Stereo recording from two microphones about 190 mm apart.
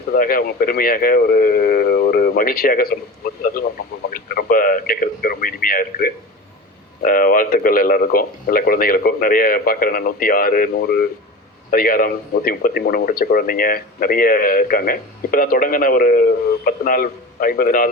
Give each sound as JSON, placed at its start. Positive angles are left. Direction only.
{"t": 0.1, "sound": "speech", "side_deg": 45}